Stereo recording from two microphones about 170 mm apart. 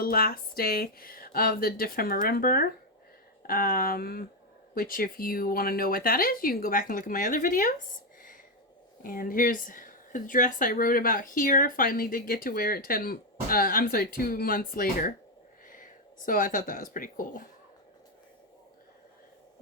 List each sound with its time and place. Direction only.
0.0 s speech: 60° left (ahead or behind)
9.0 s speech: 55° left (ahead or behind)